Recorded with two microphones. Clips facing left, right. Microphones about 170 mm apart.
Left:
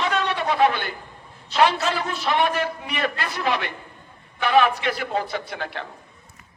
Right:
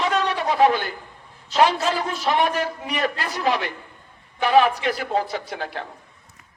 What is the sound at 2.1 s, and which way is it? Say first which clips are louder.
A man's voice: even; 40° right (ahead or behind).